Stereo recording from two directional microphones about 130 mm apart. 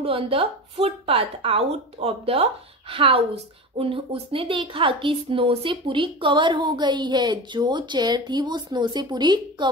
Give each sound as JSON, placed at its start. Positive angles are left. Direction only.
{"t": 0.0, "sound": "a woman's voice", "side_deg": -45}